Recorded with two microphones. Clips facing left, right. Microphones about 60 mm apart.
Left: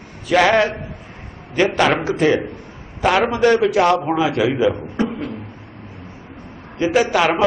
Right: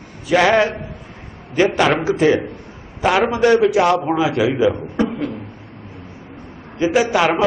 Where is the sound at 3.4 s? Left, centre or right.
Centre.